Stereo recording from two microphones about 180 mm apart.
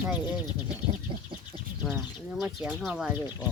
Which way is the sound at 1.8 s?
Centre (ahead or behind).